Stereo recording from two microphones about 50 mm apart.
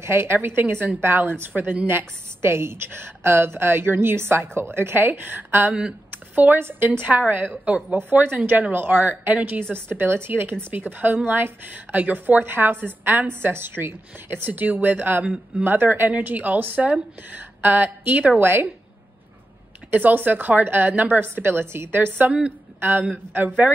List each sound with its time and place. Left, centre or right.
0.0 s a woman's voice: right
1.5 s a woman's voice: right
1.9 s a woman's voice: right
5.7 s speech: centre
6.3 s a woman's voice: right
9.6 s a woman's voice: right
10.7 s a woman's voice: right
13.3 s a woman's voice: right
17.6 s speech: right
18.4 s a woman's voice: right
19.9 s a woman's voice: right